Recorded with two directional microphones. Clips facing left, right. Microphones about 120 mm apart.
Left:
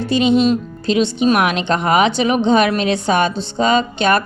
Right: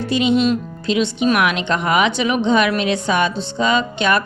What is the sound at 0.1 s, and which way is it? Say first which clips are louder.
Speech: left 2 dB; 35° left (ahead or behind).